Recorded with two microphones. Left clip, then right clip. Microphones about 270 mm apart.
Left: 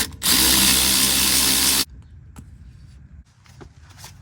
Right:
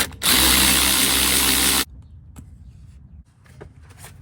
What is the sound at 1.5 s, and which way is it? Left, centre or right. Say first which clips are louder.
Spray: even; centre.